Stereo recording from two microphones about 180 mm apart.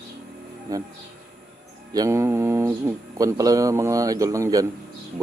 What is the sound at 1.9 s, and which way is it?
Speech, 20° right (ahead or behind).